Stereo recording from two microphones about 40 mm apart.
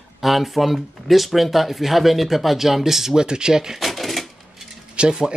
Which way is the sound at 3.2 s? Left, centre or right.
Centre.